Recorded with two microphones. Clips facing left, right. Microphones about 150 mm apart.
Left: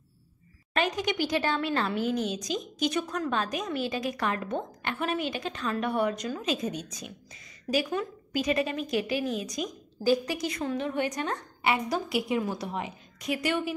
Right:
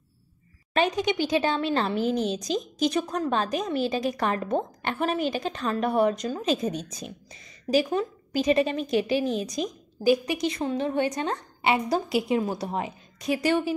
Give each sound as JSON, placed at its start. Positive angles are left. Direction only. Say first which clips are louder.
{"t": 0.7, "sound": "a woman's voice", "louder": "right 4 dB", "side_deg": -25}